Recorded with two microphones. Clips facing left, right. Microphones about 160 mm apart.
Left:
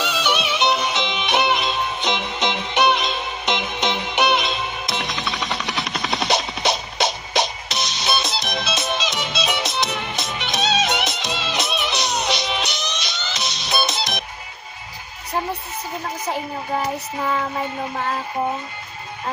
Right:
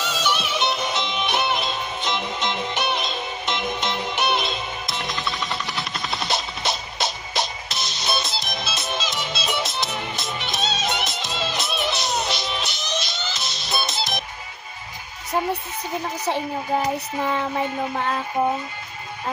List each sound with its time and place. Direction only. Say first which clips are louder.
0.0 s music: left 3 dB; 70° left (ahead or behind)
5.3 s jackhammer: left 2 dB; 75° left (ahead or behind)
6.0 s a sound: left 5 dB; 75° left (ahead or behind)
6.7 s music: left 5 dB; 75° left (ahead or behind)
16.8 s child singing: right 1 dB; 20° right (ahead or behind)